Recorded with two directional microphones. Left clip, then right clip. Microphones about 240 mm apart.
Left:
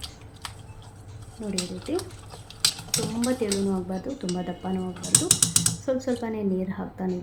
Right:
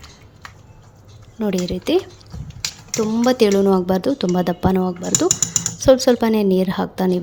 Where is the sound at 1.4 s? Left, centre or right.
Right.